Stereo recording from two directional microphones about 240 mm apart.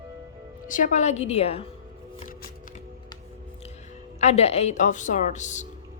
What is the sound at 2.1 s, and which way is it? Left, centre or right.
Music, left.